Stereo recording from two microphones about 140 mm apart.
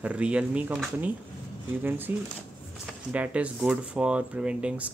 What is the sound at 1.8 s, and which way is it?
Speech, 15° right (ahead or behind).